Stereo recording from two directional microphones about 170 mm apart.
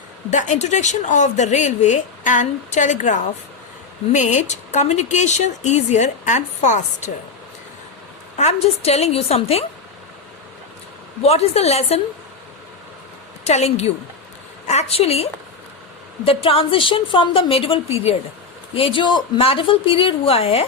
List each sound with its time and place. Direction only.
0.3 s a woman's voice: 45° left (ahead or behind)
8.4 s a woman's voice: 40° left (ahead or behind)
11.2 s a woman's voice: 40° left (ahead or behind)
13.4 s a woman's voice: 40° left (ahead or behind)